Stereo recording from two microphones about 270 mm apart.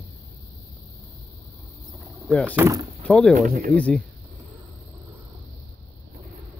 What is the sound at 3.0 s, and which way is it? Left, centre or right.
Speech, centre.